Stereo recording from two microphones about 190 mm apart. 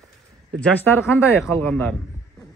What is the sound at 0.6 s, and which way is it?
Speech, 10° left (ahead or behind).